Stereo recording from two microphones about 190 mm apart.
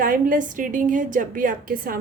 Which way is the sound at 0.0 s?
45° right (ahead or behind).